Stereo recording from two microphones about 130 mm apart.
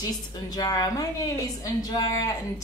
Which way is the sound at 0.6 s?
30° left (ahead or behind).